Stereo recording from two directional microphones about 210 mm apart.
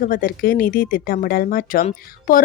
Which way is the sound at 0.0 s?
40° left (ahead or behind).